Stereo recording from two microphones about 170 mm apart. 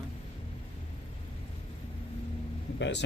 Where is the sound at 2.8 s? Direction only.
90° left.